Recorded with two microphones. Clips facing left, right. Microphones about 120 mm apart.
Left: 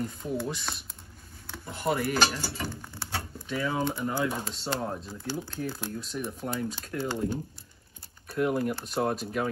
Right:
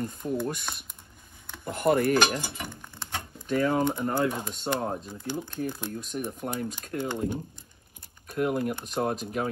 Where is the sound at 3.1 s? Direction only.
15° right (ahead or behind).